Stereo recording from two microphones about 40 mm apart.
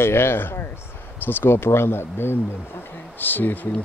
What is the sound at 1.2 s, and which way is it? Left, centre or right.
Speech, left.